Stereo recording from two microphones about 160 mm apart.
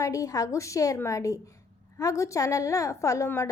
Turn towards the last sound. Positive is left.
turn(degrees=20)  # may be behind; listen again after turning